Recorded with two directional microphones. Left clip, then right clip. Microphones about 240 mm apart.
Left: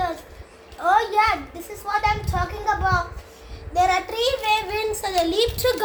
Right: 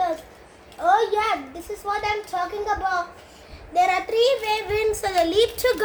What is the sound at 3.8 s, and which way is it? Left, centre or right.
A child's voice, centre.